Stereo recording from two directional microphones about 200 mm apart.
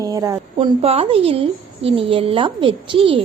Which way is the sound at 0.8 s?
30° right (ahead or behind).